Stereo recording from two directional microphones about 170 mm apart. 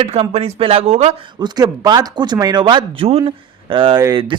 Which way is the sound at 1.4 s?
25° right (ahead or behind).